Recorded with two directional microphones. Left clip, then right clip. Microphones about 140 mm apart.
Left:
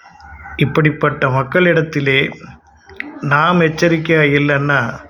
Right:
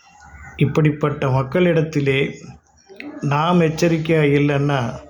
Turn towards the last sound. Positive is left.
turn(degrees=-30)  # may be behind; listen again after turning